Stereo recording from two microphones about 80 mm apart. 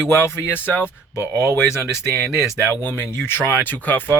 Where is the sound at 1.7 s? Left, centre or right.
Left.